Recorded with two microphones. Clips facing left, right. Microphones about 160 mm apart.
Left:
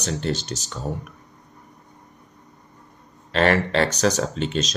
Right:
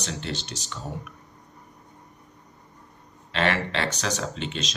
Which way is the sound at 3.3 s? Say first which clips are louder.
Left 6 dB; 40° left (ahead or behind).